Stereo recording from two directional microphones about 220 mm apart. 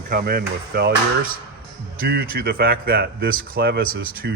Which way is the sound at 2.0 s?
45° right (ahead or behind).